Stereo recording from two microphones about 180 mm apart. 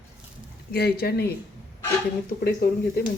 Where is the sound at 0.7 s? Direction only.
60° left (ahead or behind).